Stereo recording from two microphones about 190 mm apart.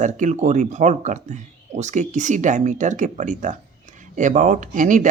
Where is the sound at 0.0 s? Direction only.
40° right (ahead or behind).